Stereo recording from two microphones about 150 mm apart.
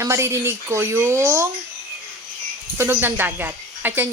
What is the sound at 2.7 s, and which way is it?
Speech, 15° right (ahead or behind).